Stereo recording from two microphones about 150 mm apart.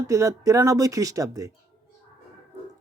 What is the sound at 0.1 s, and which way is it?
Speech, 20° right (ahead or behind).